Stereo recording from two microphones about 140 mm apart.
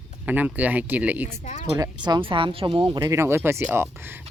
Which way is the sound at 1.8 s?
30° right (ahead or behind).